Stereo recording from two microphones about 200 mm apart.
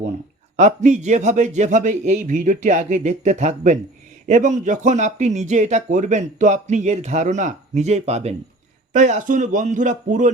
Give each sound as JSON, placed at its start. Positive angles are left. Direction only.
{"t": 0.5, "sound": "speech", "side_deg": -35}